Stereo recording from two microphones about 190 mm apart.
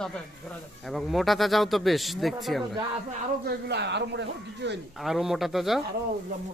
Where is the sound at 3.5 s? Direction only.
65° right (ahead or behind).